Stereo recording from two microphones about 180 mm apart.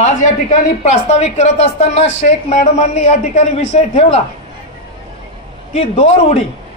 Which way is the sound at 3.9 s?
35° left (ahead or behind).